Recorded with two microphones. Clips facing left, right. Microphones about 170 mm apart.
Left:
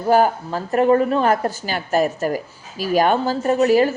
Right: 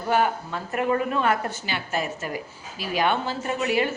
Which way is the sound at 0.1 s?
40° left (ahead or behind).